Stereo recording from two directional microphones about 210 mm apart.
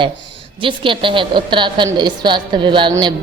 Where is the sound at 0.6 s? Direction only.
25° right (ahead or behind).